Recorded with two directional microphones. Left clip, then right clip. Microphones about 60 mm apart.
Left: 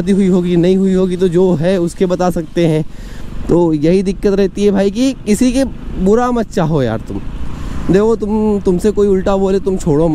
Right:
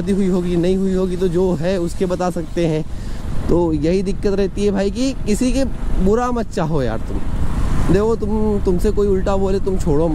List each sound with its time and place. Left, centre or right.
0.0 s a man's voice: left